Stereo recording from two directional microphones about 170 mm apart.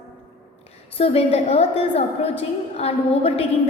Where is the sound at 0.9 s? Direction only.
35° left (ahead or behind).